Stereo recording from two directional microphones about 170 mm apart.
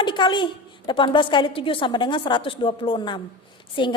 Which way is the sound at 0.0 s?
25° left (ahead or behind).